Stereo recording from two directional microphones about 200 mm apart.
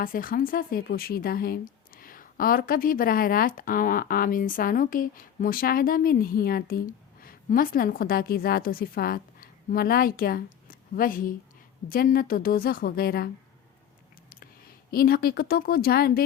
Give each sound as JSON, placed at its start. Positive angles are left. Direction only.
{"t": 0.0, "sound": "speech", "side_deg": 45}
{"t": 14.8, "sound": "speech", "side_deg": 50}